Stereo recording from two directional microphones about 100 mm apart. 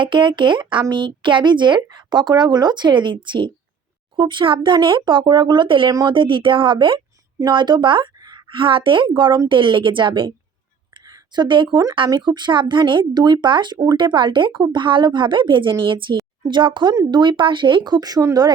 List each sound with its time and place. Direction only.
0.0 s speech: 55° right (ahead or behind)
8.4 s speech: 60° right (ahead or behind)
10.9 s a sound: 40° right (ahead or behind)
11.4 s speech: 55° right (ahead or behind)
16.1 s a woman's voice: 45° right (ahead or behind)